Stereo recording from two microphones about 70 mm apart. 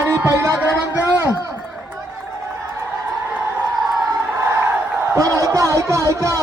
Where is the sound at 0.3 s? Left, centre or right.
Right.